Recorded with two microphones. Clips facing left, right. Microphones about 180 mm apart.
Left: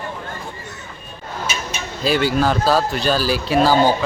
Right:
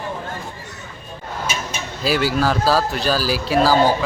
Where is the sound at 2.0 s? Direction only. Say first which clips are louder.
Left 1 dB; 5° right (ahead or behind).